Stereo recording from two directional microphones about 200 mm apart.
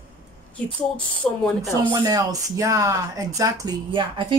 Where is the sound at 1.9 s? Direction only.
20° right (ahead or behind).